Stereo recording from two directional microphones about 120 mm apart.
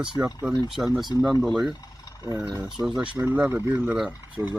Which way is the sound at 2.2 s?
20° right (ahead or behind).